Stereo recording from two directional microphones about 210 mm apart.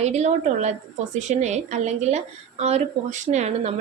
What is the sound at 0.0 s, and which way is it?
A woman's voice, 30° right (ahead or behind).